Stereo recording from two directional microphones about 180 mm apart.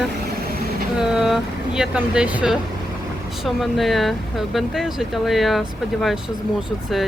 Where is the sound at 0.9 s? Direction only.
5° right (ahead or behind).